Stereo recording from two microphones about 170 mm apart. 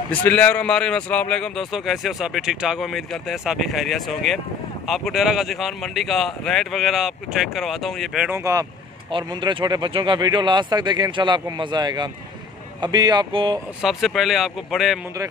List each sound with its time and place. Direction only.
0.1 s a man's voice: 10° left (ahead or behind)
8.3 s speech: 15° right (ahead or behind)
13.8 s a man's voice: centre (ahead or behind)